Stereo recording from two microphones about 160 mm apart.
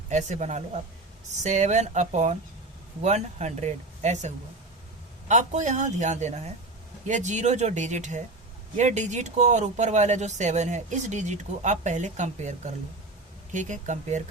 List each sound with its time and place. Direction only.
0.1 s speech: 45° right (ahead or behind)
5.3 s speech: 50° right (ahead or behind)